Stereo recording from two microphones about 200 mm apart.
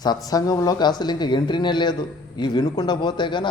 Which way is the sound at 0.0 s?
20° left (ahead or behind).